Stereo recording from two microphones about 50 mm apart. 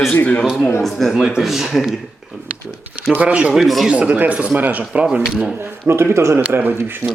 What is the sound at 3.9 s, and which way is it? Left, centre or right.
Speech, right.